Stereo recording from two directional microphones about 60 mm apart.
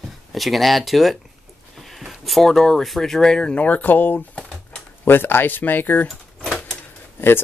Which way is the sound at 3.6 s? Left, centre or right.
Left.